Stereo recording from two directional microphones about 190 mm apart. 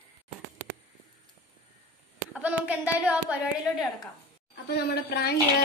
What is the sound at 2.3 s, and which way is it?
Speech, 10° right (ahead or behind).